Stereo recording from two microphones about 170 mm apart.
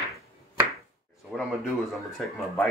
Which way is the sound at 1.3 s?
Centre (ahead or behind).